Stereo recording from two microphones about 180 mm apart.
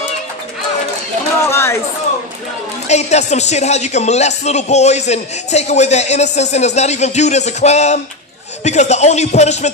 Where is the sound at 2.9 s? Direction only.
40° left (ahead or behind).